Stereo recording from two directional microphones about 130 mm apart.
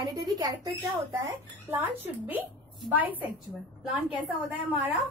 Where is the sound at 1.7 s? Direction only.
15° right (ahead or behind).